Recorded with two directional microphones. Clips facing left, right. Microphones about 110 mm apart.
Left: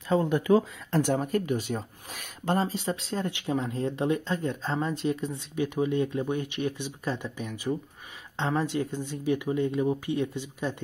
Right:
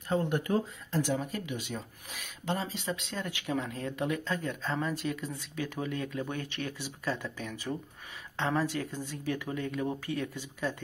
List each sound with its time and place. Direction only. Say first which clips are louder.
1.0 s speech: left 7 dB; 50° left (ahead or behind); by 10.8 s 20° left (ahead or behind)